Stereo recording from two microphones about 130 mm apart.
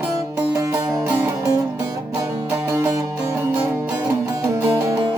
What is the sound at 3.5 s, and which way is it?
Music, 10° right (ahead or behind).